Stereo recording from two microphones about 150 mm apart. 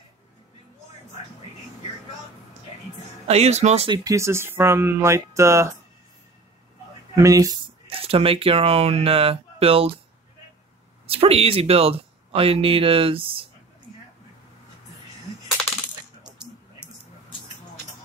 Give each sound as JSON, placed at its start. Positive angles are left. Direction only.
{"t": 3.3, "sound": "speech", "side_deg": -45}
{"t": 3.9, "sound": "speech", "side_deg": -20}
{"t": 7.2, "sound": "speech", "side_deg": -25}
{"t": 7.8, "sound": "speech", "side_deg": -40}
{"t": 11.1, "sound": "speech", "side_deg": -40}